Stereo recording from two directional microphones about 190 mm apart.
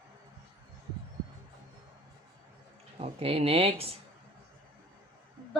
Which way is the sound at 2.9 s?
30° right (ahead or behind).